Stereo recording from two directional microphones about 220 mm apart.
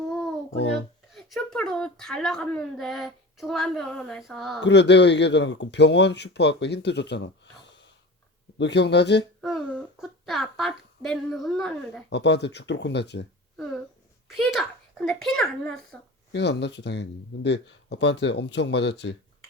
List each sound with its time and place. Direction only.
1.1 s speech: centre (ahead or behind)
4.6 s speech: 50° left (ahead or behind)
9.4 s speech: centre (ahead or behind)
12.1 s speech: 50° left (ahead or behind)
14.3 s speech: centre (ahead or behind)
16.3 s speech: 50° left (ahead or behind)